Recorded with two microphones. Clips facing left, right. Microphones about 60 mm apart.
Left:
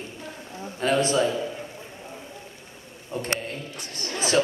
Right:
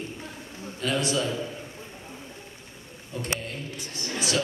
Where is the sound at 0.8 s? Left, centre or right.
Left.